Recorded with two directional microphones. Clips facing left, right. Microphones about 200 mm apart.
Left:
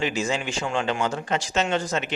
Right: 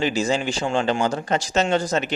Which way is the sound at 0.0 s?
35° right (ahead or behind).